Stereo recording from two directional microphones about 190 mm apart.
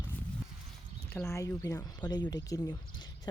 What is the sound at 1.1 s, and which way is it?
Speech, 15° left (ahead or behind).